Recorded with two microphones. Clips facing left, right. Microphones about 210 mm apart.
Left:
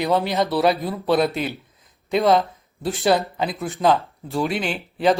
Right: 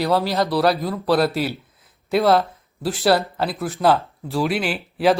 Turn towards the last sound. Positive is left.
turn(degrees=-5)  # may be behind; listen again after turning